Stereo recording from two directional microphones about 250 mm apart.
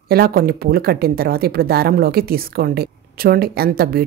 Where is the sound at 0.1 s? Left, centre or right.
Right.